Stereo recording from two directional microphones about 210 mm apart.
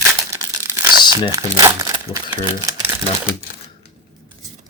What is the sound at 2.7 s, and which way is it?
Typewriter, 15° right (ahead or behind).